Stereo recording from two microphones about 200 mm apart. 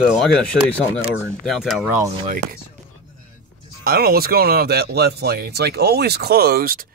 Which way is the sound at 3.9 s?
50° right (ahead or behind).